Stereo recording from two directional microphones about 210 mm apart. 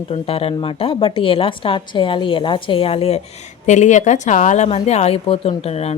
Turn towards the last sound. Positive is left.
turn(degrees=30)  # may be behind; listen again after turning